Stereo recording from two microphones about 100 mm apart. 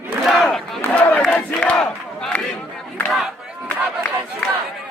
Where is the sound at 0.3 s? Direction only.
Centre (ahead or behind).